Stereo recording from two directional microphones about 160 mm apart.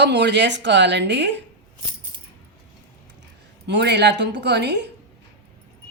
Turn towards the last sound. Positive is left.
turn(degrees=-90)